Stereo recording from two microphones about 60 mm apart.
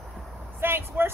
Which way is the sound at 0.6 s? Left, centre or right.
Right.